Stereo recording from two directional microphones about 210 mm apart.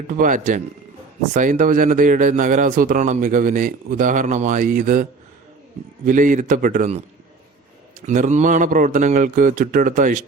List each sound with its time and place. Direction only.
0.1 s speech: 40° right (ahead or behind)
6.1 s speech: 40° right (ahead or behind)
8.0 s speech: 35° right (ahead or behind)